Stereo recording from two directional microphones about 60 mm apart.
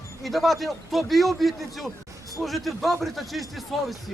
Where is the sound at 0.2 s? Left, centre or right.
Centre.